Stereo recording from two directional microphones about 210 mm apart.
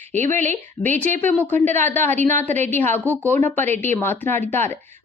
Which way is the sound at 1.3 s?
10° left (ahead or behind).